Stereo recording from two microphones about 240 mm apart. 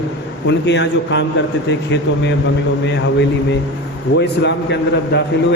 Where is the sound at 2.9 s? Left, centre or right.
Left.